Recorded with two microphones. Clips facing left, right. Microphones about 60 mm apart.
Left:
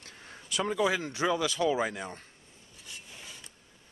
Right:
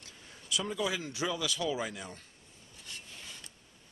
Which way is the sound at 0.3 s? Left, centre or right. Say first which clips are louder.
Left 4 dB; left.